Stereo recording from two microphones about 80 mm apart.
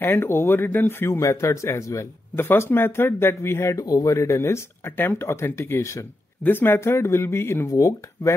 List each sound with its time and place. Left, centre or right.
0.0 s speech: left
2.3 s speech: left
3.8 s speech: left
7.6 s speech: left